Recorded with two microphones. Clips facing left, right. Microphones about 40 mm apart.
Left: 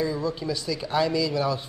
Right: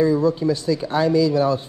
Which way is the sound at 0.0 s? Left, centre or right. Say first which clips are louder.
Right 9 dB; right.